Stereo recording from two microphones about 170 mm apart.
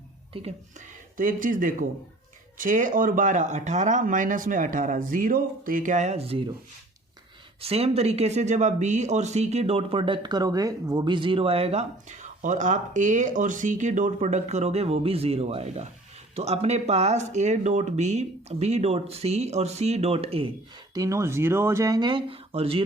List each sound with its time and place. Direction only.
1.1 s speech: 50° right (ahead or behind); by 6.4 s 35° right (ahead or behind)
7.6 s speech: 35° right (ahead or behind)
20.9 s speech: 20° right (ahead or behind); by 22.8 s 35° right (ahead or behind)